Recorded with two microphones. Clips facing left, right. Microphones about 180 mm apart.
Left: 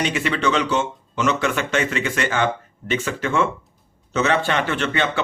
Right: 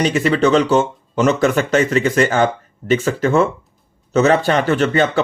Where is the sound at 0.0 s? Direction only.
40° right (ahead or behind).